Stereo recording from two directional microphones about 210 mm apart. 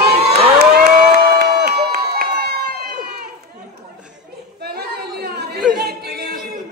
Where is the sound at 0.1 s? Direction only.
50° right (ahead or behind).